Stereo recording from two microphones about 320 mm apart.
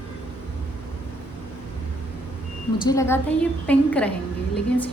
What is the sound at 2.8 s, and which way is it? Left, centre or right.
A woman's voice, centre.